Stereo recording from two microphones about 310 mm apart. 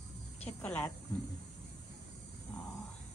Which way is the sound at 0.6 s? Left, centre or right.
Centre.